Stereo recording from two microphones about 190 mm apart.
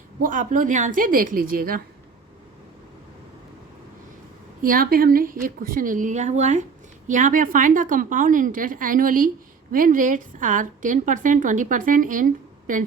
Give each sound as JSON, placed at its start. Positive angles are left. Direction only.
{"t": 0.2, "sound": "a woman's voice", "side_deg": -45}
{"t": 4.6, "sound": "a woman's voice", "side_deg": -50}